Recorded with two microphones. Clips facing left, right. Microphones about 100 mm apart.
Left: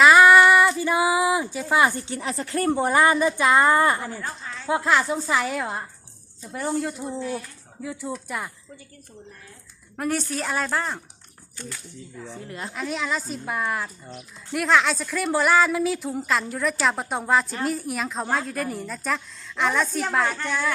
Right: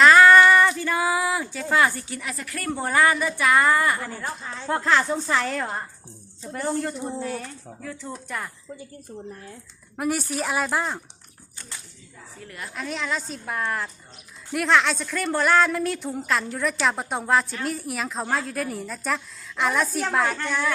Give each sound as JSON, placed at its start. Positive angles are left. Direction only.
{"t": 0.0, "sound": "a sound", "side_deg": 15}
{"t": 1.7, "sound": "a woman's voice", "side_deg": 20}
{"t": 4.6, "sound": "a woman's voice", "side_deg": 10}
{"t": 7.2, "sound": "speech", "side_deg": -45}
{"t": 7.8, "sound": "a woman's voice", "side_deg": 15}
{"t": 10.0, "sound": "speech", "side_deg": -10}
{"t": 12.5, "sound": "a woman's voice", "side_deg": 25}
{"t": 12.7, "sound": "a woman's voice", "side_deg": 0}